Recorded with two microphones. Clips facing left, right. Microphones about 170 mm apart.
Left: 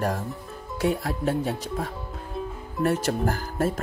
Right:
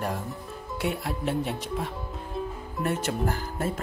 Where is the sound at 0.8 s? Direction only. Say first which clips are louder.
Left 5 dB; 40° left (ahead or behind).